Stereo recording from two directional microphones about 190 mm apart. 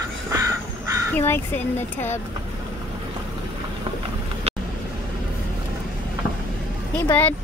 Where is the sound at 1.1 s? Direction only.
10° left (ahead or behind).